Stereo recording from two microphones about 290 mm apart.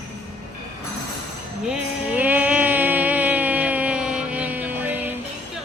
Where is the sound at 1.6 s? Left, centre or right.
Centre.